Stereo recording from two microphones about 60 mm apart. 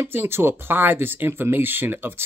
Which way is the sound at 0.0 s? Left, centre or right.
Right.